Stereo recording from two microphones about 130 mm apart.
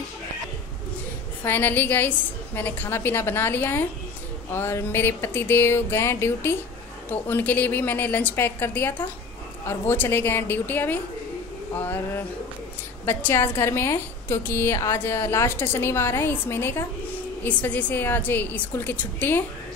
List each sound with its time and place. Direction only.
1.4 s a woman's voice: 15° left (ahead or behind)
13.0 s a woman's voice: 15° left (ahead or behind)